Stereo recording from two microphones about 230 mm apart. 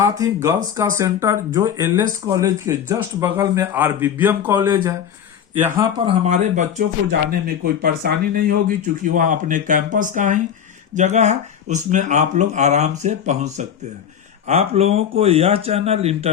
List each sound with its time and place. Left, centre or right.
0.4 s speech: centre
6.1 s speech: right
7.1 s speech: right